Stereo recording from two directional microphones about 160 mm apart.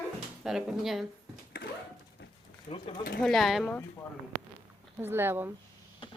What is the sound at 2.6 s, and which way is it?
Speech, 30° left (ahead or behind).